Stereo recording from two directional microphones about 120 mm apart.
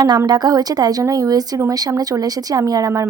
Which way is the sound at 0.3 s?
35° right (ahead or behind).